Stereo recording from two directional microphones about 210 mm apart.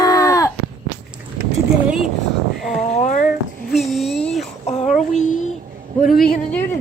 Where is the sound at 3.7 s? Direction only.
Centre (ahead or behind).